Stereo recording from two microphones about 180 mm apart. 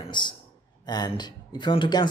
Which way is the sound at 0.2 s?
25° left (ahead or behind).